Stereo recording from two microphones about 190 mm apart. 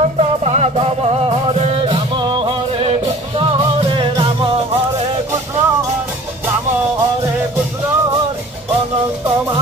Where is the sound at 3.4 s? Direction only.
30° right (ahead or behind).